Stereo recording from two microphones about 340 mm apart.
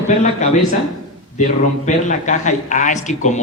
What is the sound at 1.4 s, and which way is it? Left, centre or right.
Speech, left.